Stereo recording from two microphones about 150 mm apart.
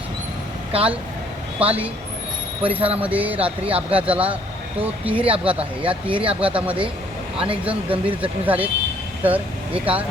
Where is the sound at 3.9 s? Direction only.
10° right (ahead or behind).